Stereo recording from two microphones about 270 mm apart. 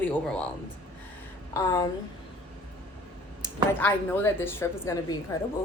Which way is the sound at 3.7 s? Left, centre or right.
Centre.